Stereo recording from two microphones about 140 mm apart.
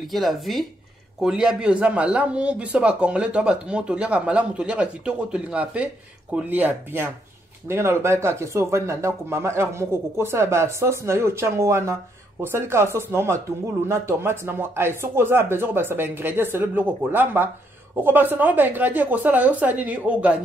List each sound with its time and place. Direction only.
0.1 s a man's voice: centre (ahead or behind)